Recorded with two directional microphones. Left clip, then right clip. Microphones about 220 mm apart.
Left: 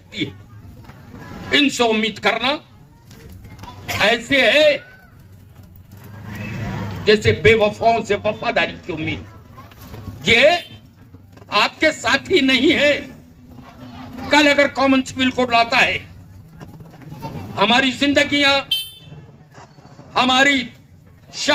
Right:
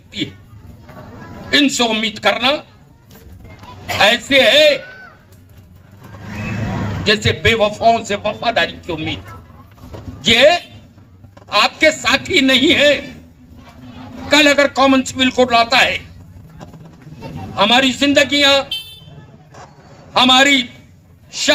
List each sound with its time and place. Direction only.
1.5 s a man's voice: 35° right (ahead or behind)
4.0 s a man's voice: 35° right (ahead or behind)
7.0 s a man's voice: 35° right (ahead or behind)
10.2 s a man's voice: 35° right (ahead or behind)
14.3 s a man's voice: 35° right (ahead or behind)
17.5 s a man's voice: 35° right (ahead or behind)
20.1 s a man's voice: 35° right (ahead or behind)